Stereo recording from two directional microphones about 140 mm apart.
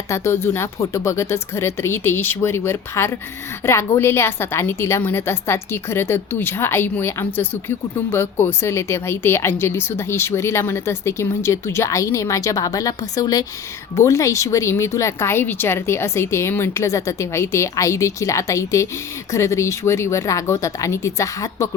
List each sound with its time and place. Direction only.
0.1 s a woman's voice: 15° left (ahead or behind)